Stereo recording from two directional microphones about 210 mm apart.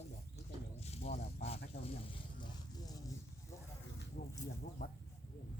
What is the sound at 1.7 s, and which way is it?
Speech, 45° left (ahead or behind).